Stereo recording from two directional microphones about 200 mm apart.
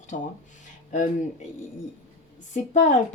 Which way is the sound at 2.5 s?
35° left (ahead or behind).